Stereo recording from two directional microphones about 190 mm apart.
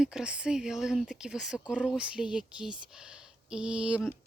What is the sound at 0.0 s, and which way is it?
Speech, 5° right (ahead or behind).